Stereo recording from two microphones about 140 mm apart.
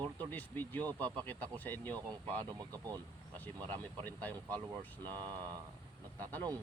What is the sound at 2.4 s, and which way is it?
Speech, 25° right (ahead or behind).